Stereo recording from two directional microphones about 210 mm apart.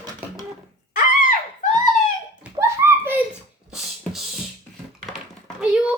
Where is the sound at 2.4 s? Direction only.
15° right (ahead or behind).